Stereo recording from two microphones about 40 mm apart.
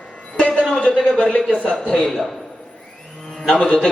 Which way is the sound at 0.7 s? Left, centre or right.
Left.